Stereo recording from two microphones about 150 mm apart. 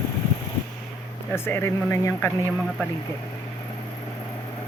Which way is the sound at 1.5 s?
15° left (ahead or behind).